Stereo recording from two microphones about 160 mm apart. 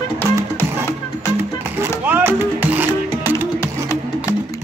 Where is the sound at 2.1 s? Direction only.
15° right (ahead or behind).